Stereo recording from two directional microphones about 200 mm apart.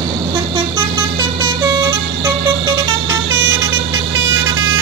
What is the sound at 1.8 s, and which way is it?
Vehicle, 20° right (ahead or behind).